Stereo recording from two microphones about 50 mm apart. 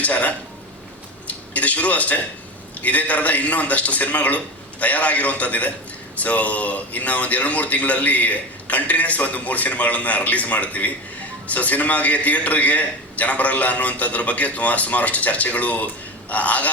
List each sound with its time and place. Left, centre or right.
0.0 s a man's voice: left